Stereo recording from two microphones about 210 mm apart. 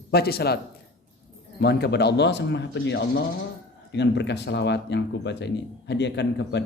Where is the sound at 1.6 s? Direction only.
50° left (ahead or behind).